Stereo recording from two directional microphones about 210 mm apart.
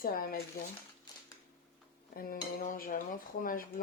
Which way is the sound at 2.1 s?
45° left (ahead or behind).